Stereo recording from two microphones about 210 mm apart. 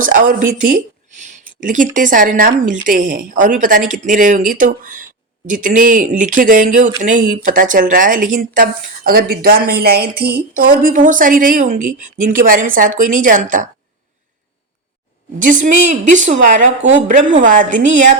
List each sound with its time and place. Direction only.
0.0 s speech: 40° right (ahead or behind)
15.4 s speech: 40° right (ahead or behind)